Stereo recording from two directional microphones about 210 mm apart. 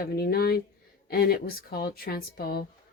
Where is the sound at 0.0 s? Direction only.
45° left (ahead or behind).